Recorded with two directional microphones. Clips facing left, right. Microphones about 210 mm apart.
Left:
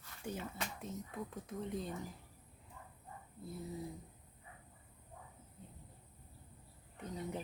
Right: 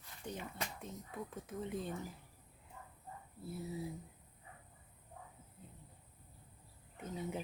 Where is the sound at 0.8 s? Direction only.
Centre (ahead or behind).